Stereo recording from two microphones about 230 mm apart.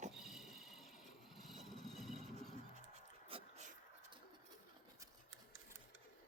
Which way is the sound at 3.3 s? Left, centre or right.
Right.